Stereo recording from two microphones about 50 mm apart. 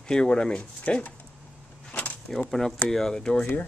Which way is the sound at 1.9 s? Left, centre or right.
Left.